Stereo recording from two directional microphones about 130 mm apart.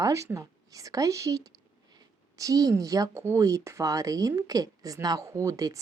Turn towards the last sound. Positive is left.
turn(degrees=-25)  # may be behind; listen again after turning